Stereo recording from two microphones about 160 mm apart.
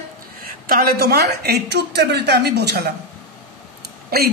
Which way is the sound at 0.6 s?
70° right (ahead or behind).